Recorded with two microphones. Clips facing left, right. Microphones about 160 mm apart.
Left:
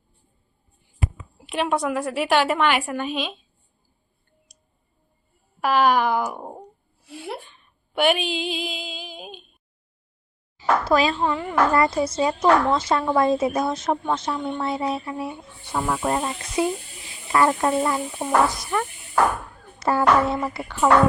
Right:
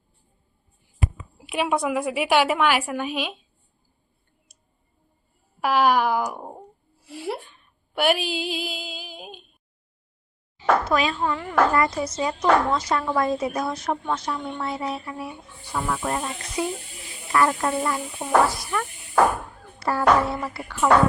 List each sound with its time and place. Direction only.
1.4 s a woman's voice: 5° right (ahead or behind)
4.5 s a sound: 5° right (ahead or behind)
5.5 s a woman's voice: 10° right (ahead or behind)
6.4 s a sound: 5° left (ahead or behind)
10.6 s speech: 35° left (ahead or behind)
19.8 s speech: 20° left (ahead or behind)